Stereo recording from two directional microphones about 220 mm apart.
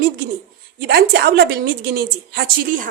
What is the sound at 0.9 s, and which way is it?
A woman's voice, 45° right (ahead or behind).